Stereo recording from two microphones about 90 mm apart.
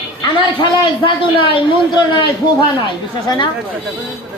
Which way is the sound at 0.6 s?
60° left (ahead or behind).